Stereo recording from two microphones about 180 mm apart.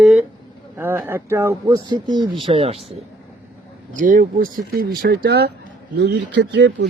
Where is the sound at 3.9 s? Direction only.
50° right (ahead or behind).